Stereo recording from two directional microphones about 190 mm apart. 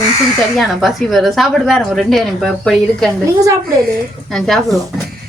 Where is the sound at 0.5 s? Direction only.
Centre (ahead or behind).